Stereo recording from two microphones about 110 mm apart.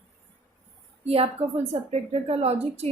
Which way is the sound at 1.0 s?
65° right (ahead or behind).